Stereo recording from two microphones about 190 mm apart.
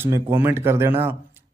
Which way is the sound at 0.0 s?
10° right (ahead or behind).